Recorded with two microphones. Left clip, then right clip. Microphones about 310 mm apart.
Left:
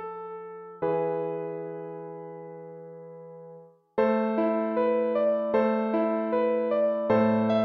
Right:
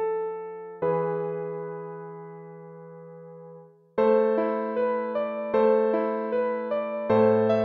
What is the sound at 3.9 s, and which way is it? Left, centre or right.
Music, right.